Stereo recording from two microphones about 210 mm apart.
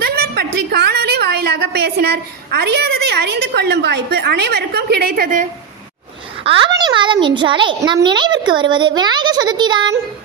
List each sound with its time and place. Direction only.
0.0 s a woman's voice: 50° right (ahead or behind)
6.4 s a child's voice: 20° right (ahead or behind)